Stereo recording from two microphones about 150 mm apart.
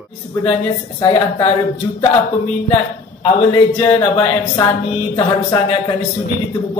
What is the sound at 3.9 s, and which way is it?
A woman's voice, 40° left (ahead or behind).